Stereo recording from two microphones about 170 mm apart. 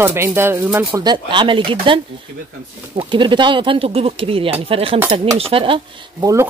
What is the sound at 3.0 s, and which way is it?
Speech, 30° right (ahead or behind).